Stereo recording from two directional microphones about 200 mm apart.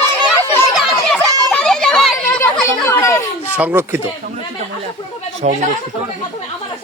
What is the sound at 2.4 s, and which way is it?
Chatter, 10° left (ahead or behind).